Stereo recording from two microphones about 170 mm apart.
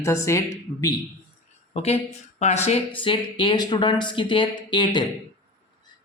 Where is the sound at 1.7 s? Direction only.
35° left (ahead or behind).